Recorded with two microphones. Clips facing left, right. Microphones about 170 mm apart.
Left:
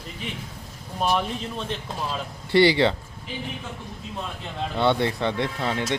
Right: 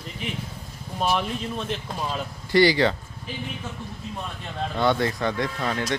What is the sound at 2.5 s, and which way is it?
Speech, 25° left (ahead or behind).